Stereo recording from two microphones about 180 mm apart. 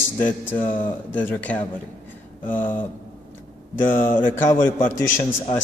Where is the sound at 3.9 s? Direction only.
50° left (ahead or behind).